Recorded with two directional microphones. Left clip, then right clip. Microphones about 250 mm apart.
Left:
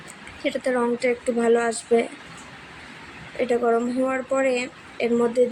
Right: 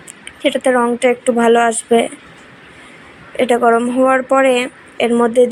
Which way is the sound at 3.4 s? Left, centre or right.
Centre.